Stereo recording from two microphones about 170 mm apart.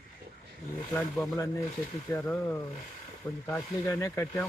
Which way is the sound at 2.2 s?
15° left (ahead or behind).